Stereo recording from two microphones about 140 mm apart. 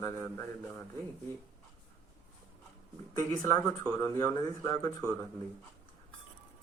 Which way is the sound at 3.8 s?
15° left (ahead or behind).